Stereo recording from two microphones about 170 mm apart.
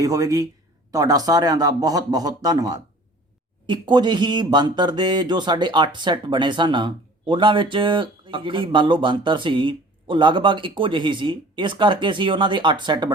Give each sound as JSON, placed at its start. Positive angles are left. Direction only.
{"t": 0.0, "sound": "speech", "side_deg": -20}